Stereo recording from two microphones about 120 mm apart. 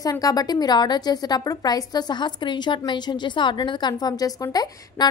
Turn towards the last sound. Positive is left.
turn(degrees=35)  # may be behind; listen again after turning